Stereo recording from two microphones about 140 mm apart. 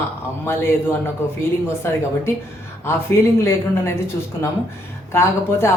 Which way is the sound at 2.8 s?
20° left (ahead or behind).